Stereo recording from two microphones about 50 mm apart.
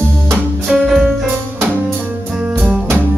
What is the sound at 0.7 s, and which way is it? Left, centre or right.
Music, centre.